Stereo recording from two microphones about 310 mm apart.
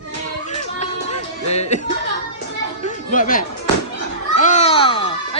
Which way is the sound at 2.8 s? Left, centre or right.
Left.